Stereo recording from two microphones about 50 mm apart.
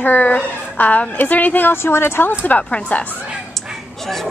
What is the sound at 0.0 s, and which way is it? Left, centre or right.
A woman's voice, left.